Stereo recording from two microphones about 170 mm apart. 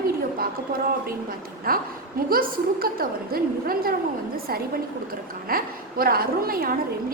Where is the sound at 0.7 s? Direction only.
60° right (ahead or behind).